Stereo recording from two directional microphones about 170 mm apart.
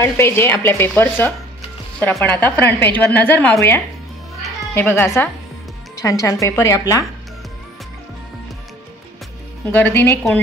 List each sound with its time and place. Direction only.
0.0 s a woman's voice: 15° left (ahead or behind)
9.7 s a woman's voice: 10° left (ahead or behind)